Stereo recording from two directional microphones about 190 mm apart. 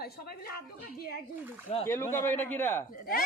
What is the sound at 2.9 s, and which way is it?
Speech, 50° left (ahead or behind).